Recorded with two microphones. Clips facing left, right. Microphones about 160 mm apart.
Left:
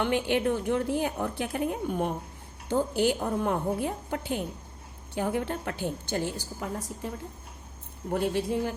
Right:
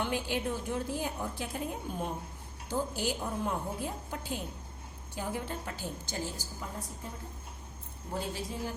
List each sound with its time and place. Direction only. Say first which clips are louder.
0.0 s a woman's voice: left 7 dB; 65° left (ahead or behind)
8.1 s a woman's voice: left 10 dB; 65° left (ahead or behind)